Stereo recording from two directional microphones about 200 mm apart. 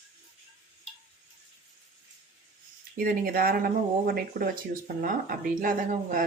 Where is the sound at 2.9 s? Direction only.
50° right (ahead or behind).